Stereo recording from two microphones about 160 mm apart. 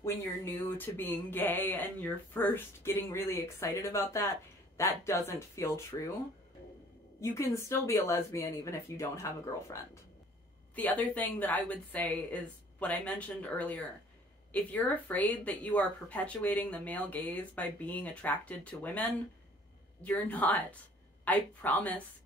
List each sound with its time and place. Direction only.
0.0 s speech: 15° left (ahead or behind)
7.2 s speech: 15° left (ahead or behind)